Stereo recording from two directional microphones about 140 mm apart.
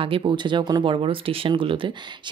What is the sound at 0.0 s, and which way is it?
Speech, 40° right (ahead or behind).